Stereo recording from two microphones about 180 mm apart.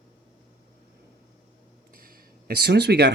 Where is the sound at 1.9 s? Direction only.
55° right (ahead or behind).